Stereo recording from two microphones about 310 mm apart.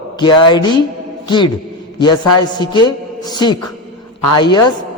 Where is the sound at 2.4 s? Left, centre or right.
Centre.